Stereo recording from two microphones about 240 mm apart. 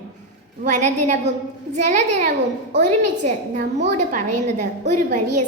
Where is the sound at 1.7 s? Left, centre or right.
Right.